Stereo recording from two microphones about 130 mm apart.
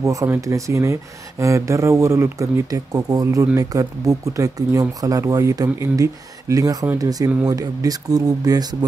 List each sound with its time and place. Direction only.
0.0 s speech: 25° right (ahead or behind)